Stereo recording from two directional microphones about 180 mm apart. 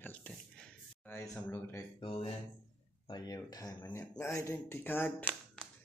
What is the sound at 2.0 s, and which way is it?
Speech, 30° left (ahead or behind).